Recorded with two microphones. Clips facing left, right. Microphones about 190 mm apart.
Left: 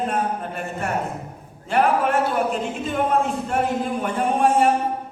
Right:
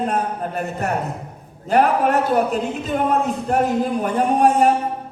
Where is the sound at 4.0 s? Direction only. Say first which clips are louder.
Right 3 dB; 40° right (ahead or behind).